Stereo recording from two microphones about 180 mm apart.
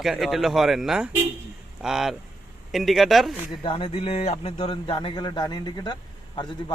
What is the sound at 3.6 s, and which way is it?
Speech, 30° left (ahead or behind).